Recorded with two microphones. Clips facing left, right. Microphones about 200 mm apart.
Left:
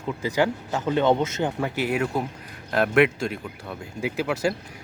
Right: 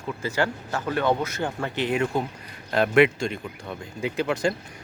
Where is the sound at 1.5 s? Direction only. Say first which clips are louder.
Right 2 dB; 10° left (ahead or behind).